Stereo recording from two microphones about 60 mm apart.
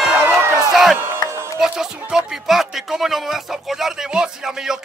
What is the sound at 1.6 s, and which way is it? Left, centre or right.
Speech, centre.